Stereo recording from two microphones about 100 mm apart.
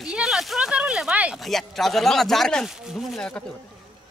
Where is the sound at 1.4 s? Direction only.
Centre (ahead or behind).